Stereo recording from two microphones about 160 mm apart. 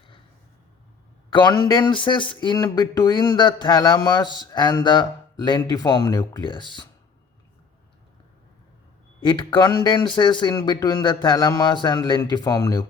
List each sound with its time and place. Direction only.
1.3 s speech: 25° left (ahead or behind)
9.2 s speech: 30° left (ahead or behind)